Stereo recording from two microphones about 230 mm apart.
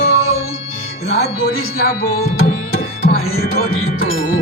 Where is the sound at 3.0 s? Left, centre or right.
Left.